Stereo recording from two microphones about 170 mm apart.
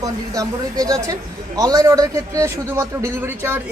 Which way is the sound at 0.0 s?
20° right (ahead or behind).